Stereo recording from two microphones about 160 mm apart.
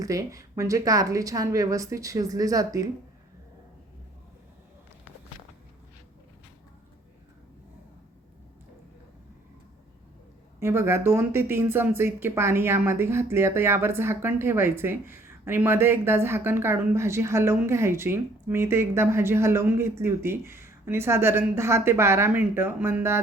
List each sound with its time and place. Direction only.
0.0 s a woman's voice: 20° right (ahead or behind)
10.6 s speech: 15° right (ahead or behind)